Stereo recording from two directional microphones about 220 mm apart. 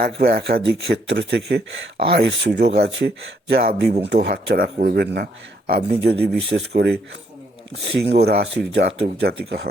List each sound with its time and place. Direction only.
0.0 s speech: 45° right (ahead or behind)
8.1 s speech: 45° right (ahead or behind)